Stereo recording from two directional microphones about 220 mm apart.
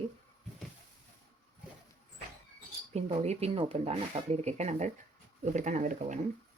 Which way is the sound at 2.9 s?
30° right (ahead or behind).